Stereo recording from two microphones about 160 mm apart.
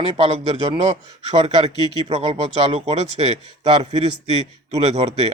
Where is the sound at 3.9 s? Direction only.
40° right (ahead or behind).